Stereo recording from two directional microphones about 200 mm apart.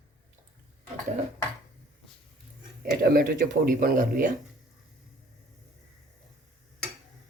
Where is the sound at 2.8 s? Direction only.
50° right (ahead or behind).